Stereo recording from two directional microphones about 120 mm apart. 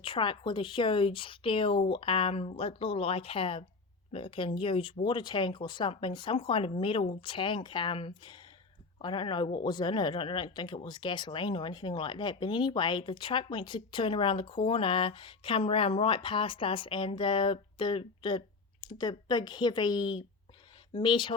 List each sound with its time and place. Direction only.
0.0 s speech: 45° left (ahead or behind)